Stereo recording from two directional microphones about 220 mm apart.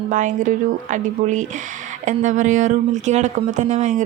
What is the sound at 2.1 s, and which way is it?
Speech, 35° right (ahead or behind).